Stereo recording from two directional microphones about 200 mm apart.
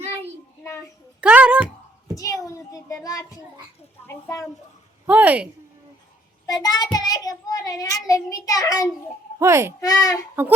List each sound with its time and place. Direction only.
1.2 s a sound: 5° right (ahead or behind)
2.1 s a child's voice: 15° left (ahead or behind)
5.0 s a woman's voice: 5° right (ahead or behind)
6.4 s a child's voice: 20° left (ahead or behind)
9.4 s a woman's voice: 15° right (ahead or behind)
9.8 s a child's voice: 15° left (ahead or behind)
10.4 s a woman's voice: 10° right (ahead or behind)